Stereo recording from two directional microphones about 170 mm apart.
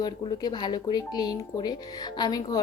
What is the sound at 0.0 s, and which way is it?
Speech, 25° left (ahead or behind).